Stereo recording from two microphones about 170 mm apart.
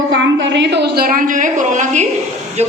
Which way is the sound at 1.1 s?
50° right (ahead or behind).